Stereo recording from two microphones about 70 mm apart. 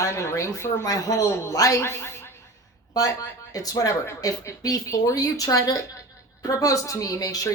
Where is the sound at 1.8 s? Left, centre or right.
Left.